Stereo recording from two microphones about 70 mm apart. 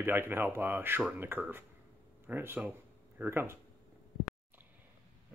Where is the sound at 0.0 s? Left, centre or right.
Right.